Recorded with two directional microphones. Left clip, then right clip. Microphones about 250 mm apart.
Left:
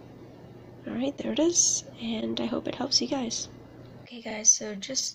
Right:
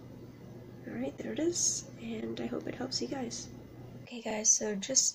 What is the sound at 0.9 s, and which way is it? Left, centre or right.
A woman's voice, left.